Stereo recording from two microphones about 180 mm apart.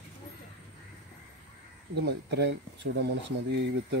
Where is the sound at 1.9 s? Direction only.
70° right (ahead or behind).